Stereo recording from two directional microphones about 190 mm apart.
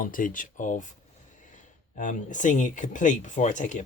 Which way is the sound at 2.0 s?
40° left (ahead or behind).